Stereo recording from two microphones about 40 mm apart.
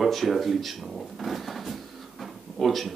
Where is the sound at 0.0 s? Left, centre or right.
Centre.